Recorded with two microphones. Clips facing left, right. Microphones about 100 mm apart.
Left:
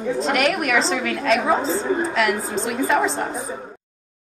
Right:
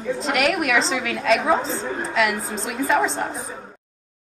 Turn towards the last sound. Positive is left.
turn(degrees=0)  # may be behind; listen again after turning